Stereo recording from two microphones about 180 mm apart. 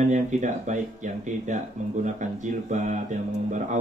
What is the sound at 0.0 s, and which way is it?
Speech, 40° right (ahead or behind).